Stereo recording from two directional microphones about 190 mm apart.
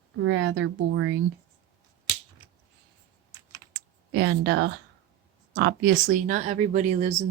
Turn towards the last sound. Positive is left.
turn(degrees=-35)  # may be behind; listen again after turning